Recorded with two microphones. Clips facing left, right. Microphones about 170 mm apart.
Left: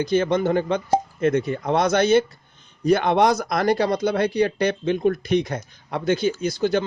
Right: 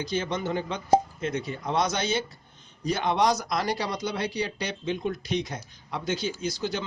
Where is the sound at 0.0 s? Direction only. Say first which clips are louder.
Left 9 dB; 55° left (ahead or behind).